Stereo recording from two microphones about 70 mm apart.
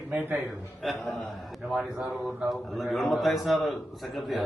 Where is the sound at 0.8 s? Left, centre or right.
Centre.